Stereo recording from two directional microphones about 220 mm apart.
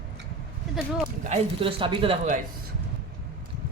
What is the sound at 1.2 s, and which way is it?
Speech, 30° right (ahead or behind).